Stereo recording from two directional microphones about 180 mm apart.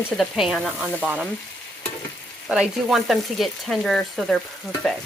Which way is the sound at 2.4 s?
5° right (ahead or behind).